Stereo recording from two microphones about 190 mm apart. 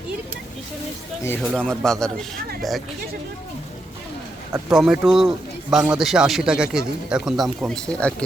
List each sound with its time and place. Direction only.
1.2 s a man's voice: 5° left (ahead or behind)
4.7 s a man's voice: centre (ahead or behind)